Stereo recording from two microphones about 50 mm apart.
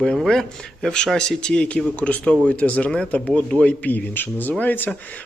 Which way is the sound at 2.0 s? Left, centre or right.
Left.